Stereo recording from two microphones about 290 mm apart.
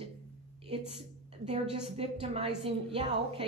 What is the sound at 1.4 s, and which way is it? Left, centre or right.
A woman's voice, right.